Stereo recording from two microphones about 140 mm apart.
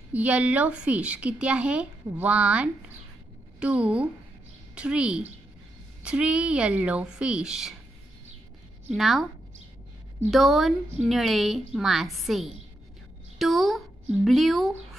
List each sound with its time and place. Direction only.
0.1 s a woman's voice: 10° right (ahead or behind)
8.9 s a woman's voice: centre (ahead or behind)
10.3 s a woman's voice: centre (ahead or behind)